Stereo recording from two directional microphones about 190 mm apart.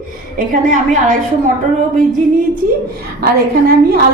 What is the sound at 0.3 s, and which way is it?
Speech, 45° right (ahead or behind).